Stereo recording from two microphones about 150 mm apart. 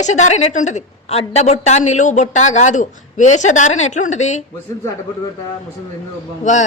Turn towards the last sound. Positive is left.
turn(degrees=55)  # may be behind; listen again after turning